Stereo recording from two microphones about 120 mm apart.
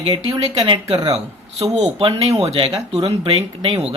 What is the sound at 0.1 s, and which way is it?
Speech, 40° right (ahead or behind).